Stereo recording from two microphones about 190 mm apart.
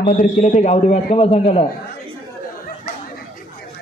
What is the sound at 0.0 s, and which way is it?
A man's voice, 45° left (ahead or behind).